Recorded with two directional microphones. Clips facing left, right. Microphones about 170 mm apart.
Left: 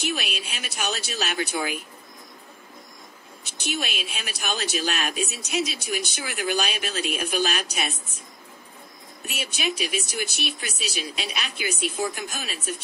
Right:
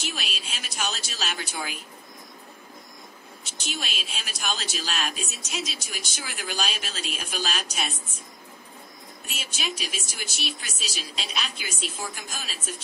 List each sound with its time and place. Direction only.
0.0 s speech: 60° left (ahead or behind)
3.6 s speech: 55° left (ahead or behind)
9.2 s speech: 60° left (ahead or behind)